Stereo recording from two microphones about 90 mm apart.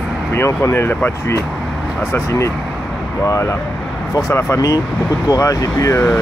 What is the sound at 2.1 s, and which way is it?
Speech, 30° left (ahead or behind).